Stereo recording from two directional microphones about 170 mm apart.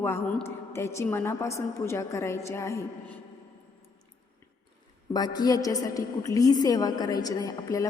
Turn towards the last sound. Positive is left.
turn(degrees=20)  # may be behind; listen again after turning